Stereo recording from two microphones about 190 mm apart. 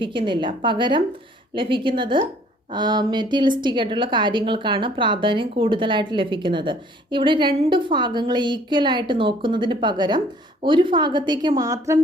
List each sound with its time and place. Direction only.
0.0 s a woman's voice: 25° right (ahead or behind)